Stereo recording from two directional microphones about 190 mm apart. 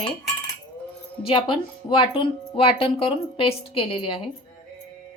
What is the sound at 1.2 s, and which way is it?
Speech, 25° left (ahead or behind).